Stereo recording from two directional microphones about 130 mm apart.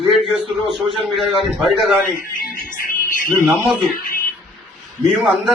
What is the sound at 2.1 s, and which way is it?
Speech, 90° left.